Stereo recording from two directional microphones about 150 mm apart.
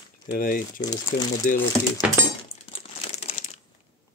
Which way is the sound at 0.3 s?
70° left (ahead or behind).